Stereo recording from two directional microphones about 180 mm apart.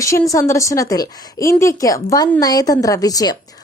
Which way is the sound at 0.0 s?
20° left (ahead or behind).